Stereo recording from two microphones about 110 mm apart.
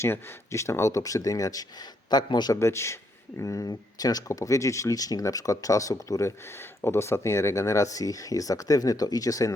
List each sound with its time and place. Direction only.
0.0 s speech: 25° left (ahead or behind); by 2.6 s 40° left (ahead or behind)
2.6 s speech: 25° left (ahead or behind)